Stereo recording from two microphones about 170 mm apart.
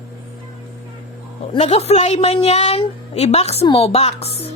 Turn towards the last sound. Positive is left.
turn(degrees=35)  # may be behind; listen again after turning